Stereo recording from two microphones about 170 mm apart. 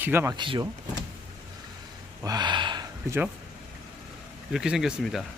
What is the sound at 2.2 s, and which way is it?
Gasp, 25° right (ahead or behind).